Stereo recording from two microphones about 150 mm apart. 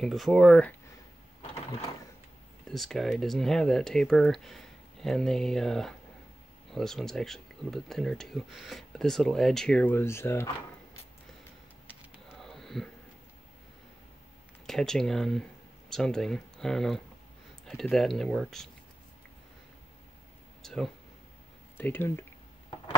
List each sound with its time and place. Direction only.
0.0 s speech: centre (ahead or behind)
2.7 s speech: centre (ahead or behind); by 10.5 s 15° left (ahead or behind)
12.3 s a sound: centre (ahead or behind)
14.7 s speech: centre (ahead or behind)
20.6 s speech: centre (ahead or behind)
21.7 s speech: 15° left (ahead or behind)